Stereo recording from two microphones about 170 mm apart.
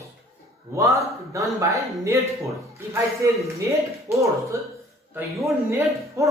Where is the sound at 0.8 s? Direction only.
20° right (ahead or behind).